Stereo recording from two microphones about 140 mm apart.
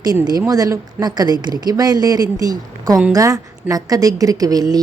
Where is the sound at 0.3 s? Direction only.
25° right (ahead or behind).